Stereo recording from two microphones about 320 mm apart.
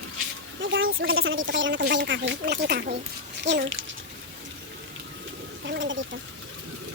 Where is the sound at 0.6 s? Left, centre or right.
Right.